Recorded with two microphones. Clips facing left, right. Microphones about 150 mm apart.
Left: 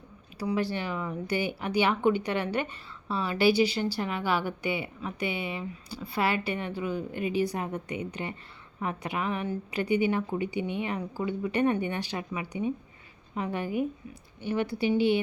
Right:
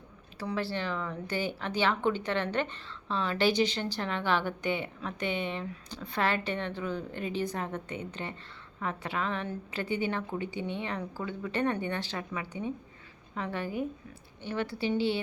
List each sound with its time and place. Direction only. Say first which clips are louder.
0.3 s speech: left 4 dB; 15° left (ahead or behind)